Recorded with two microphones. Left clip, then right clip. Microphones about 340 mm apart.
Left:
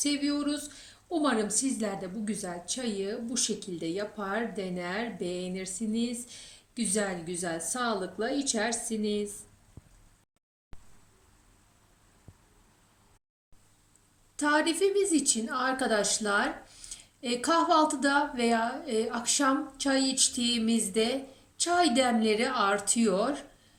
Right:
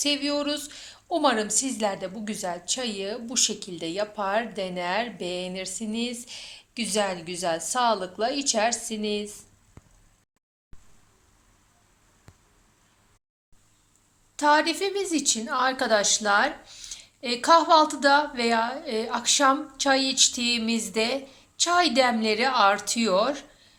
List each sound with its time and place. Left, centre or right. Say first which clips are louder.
0.0 s a woman's voice: right 5 dB; centre
14.3 s a woman's voice: right 5 dB; centre